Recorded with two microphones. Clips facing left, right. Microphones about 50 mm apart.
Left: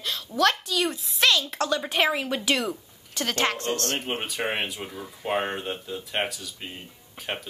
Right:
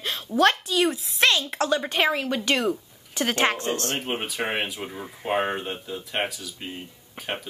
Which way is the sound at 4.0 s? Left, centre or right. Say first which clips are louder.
Right 1 dB; centre.